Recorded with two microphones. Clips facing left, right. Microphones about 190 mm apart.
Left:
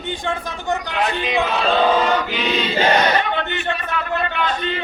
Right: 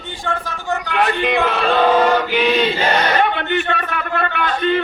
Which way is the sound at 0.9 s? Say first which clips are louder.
Right 7 dB; 60° right (ahead or behind).